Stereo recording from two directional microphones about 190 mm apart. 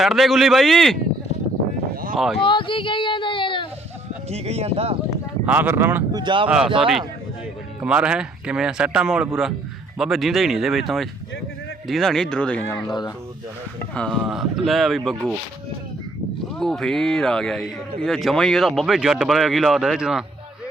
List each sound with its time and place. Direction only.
0.0 s speech: centre (ahead or behind)
2.4 s speech: 25° left (ahead or behind)
4.3 s speech: 35° right (ahead or behind)
5.5 s speech: 10° right (ahead or behind)
6.2 s speech: 25° right (ahead or behind)
7.8 s speech: 5° right (ahead or behind)
12.9 s speech: 20° left (ahead or behind)
13.9 s speech: 5° left (ahead or behind)
16.6 s speech: centre (ahead or behind)